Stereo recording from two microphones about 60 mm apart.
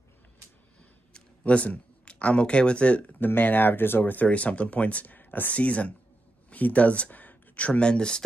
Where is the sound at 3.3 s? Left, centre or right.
Left.